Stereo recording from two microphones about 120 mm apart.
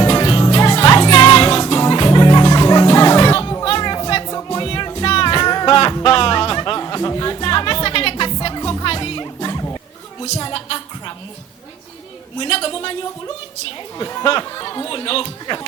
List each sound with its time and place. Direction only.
0.0 s music: 35° left (ahead or behind)
4.6 s music: 40° left (ahead or behind)
12.4 s a sound: 40° left (ahead or behind)
14.0 s chatter: 30° left (ahead or behind)